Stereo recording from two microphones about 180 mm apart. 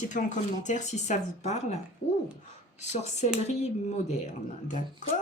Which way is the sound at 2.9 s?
40° left (ahead or behind).